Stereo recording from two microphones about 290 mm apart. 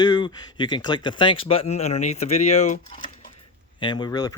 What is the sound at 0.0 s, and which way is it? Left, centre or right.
Speech, centre.